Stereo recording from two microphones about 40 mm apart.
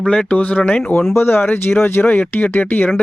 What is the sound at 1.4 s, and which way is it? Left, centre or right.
Speech, left.